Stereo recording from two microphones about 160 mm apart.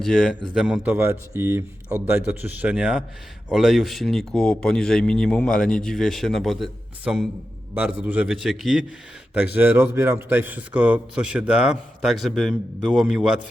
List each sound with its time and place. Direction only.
0.0 s a man's voice: 5° left (ahead or behind)